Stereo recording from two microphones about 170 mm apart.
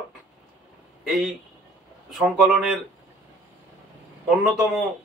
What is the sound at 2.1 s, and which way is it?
Speech, 5° right (ahead or behind).